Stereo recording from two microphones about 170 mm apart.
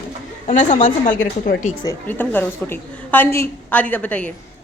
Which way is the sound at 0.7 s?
50° left (ahead or behind).